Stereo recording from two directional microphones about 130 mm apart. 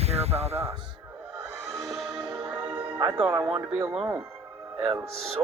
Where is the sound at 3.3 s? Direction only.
45° right (ahead or behind).